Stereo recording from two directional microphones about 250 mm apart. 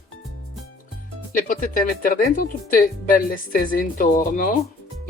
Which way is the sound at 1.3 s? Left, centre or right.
Left.